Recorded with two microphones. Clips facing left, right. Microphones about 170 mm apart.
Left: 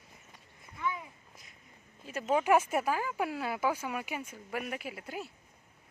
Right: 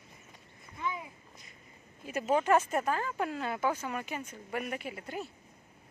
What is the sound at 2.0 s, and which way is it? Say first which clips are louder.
Speech: right 1 dB; 10° right (ahead or behind).